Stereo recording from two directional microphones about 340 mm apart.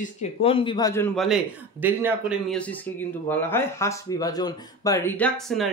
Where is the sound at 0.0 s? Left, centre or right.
Centre.